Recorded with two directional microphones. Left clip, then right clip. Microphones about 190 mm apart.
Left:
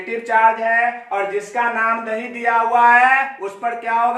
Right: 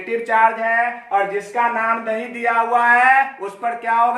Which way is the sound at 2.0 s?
15° right (ahead or behind).